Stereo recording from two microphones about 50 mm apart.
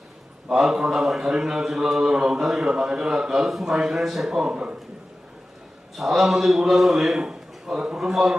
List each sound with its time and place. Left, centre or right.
0.5 s a man's voice: centre
4.3 s a man's voice: centre
6.0 s speech: centre
7.2 s a sound: centre
7.9 s speech: centre